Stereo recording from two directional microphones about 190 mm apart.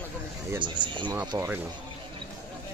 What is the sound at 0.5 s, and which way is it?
Speech, 25° right (ahead or behind).